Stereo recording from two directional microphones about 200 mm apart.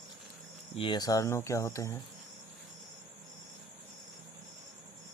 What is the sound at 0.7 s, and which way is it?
Speech, 25° left (ahead or behind).